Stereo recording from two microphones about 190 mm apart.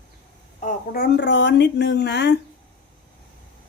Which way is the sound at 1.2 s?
65° left (ahead or behind).